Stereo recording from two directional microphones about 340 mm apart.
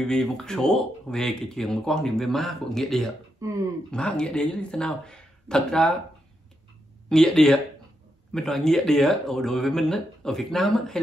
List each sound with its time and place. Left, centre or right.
0.0 s speech: centre
3.4 s speech: centre
3.9 s speech: centre
7.1 s speech: centre